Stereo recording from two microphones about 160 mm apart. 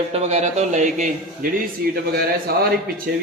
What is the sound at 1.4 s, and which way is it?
A man's voice, 65° right (ahead or behind).